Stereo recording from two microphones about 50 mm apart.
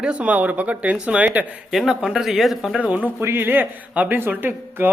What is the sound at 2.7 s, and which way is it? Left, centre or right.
Speech, right.